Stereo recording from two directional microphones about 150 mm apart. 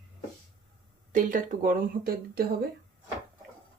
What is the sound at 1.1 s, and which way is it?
A woman's voice, 60° right (ahead or behind).